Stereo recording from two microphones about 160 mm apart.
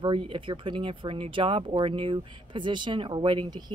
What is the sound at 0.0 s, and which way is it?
A woman's voice, 30° right (ahead or behind).